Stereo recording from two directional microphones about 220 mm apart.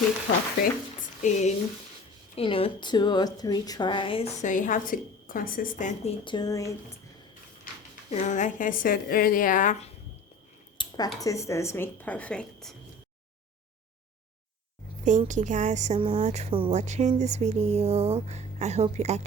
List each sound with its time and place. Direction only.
1.2 s a woman's voice: 30° left (ahead or behind)
6.2 s speech: 20° left (ahead or behind)
7.7 s a sound: 40° left (ahead or behind)
8.1 s a woman's voice: 35° left (ahead or behind)
10.8 s a sound: 20° left (ahead or behind)
11.2 s speech: 15° left (ahead or behind)
15.0 s a woman's voice: 35° right (ahead or behind)